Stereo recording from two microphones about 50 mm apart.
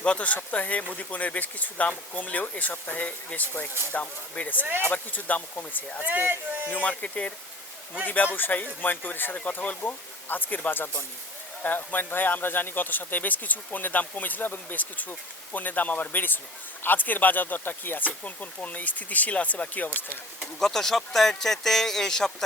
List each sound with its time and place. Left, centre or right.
0.0 s speech: left
4.6 s speech: right
4.9 s speech: left
6.1 s speech: right
6.8 s speech: left
8.0 s speech: left
20.6 s speech: centre